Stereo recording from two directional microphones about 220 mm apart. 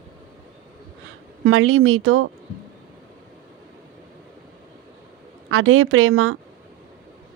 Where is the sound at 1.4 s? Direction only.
70° right (ahead or behind).